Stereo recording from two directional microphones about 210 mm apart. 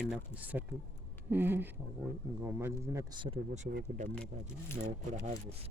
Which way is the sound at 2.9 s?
20° right (ahead or behind).